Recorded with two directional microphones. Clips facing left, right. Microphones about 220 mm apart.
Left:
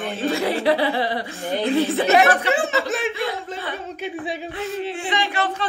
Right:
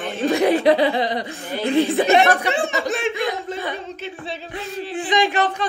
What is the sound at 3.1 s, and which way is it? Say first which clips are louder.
Speech: right 2 dB; 15° right (ahead or behind).